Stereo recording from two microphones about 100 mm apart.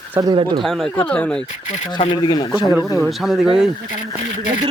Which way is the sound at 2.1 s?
50° left (ahead or behind).